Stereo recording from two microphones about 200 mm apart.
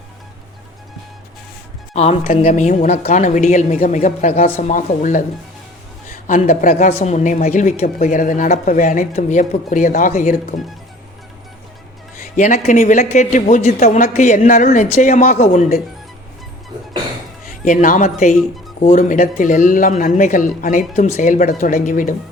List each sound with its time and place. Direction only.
2.0 s speech: 30° left (ahead or behind)
12.2 s speech: 35° left (ahead or behind)
17.7 s speech: 40° left (ahead or behind)